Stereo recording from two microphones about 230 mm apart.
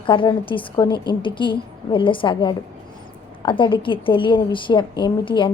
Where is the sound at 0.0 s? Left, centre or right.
Left.